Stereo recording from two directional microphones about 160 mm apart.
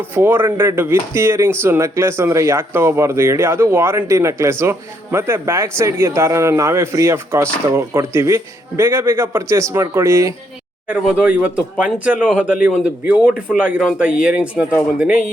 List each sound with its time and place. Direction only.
0.1 s speech: 15° right (ahead or behind)